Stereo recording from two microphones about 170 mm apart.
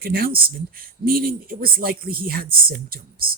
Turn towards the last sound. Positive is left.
turn(degrees=-60)  # may be behind; listen again after turning